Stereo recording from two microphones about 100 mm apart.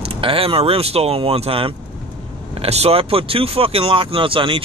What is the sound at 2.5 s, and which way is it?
Speech, 90° right.